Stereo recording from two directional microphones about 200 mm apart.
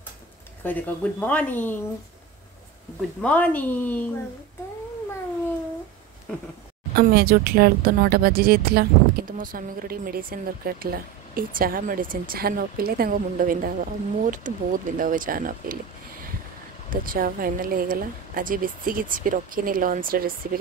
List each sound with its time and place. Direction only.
0.7 s speech: 10° left (ahead or behind)
3.2 s speech: 5° left (ahead or behind)
7.0 s speech: 50° right (ahead or behind)